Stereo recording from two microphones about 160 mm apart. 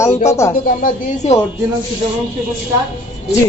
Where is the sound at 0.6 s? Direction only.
55° left (ahead or behind).